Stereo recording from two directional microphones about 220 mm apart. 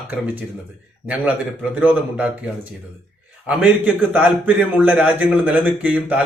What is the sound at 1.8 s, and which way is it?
A man's voice, 5° right (ahead or behind).